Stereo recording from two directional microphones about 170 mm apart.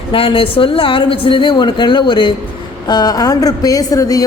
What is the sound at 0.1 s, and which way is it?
A woman's voice, 30° left (ahead or behind).